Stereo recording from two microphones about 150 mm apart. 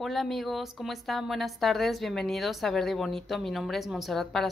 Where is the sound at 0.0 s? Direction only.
Centre (ahead or behind).